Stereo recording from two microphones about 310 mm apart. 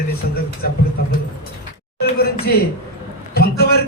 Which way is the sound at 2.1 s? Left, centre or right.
Left.